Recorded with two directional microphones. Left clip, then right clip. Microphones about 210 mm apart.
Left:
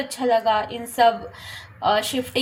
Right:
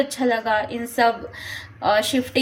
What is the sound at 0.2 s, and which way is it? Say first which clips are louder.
Speech: left 5 dB; 15° right (ahead or behind).